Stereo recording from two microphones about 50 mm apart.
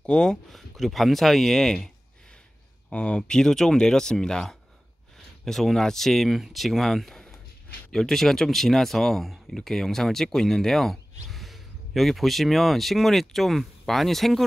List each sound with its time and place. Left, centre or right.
0.0 s speech: centre
0.5 s speech: centre
2.9 s speech: left; by 14.4 s centre